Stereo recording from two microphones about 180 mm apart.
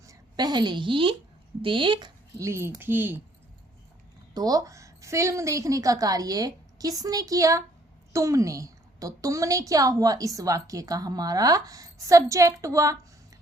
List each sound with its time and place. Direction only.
0.0 s a woman's voice: 20° right (ahead or behind)
2.4 s speech: 15° right (ahead or behind)
4.4 s a woman's voice: 20° right (ahead or behind)